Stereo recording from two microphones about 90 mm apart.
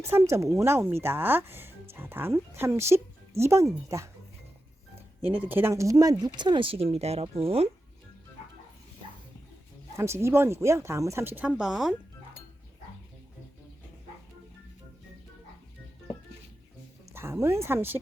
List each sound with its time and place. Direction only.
0.1 s speech: 30° right (ahead or behind)
5.2 s speech: 20° right (ahead or behind); by 7.6 s 90° right
10.0 s speech: 30° right (ahead or behind); by 11.9 s 5° right (ahead or behind)
17.1 s speech: 30° right (ahead or behind)